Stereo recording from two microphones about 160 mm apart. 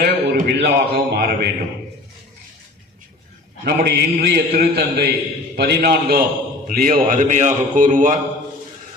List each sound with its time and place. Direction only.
0.0 s a man's voice: 80° right
3.6 s a man's voice: 85° right
6.7 s a man's voice: 65° right (ahead or behind)